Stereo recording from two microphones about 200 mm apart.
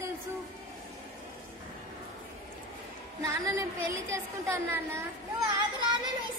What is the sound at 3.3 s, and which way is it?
A woman's voice, 15° right (ahead or behind).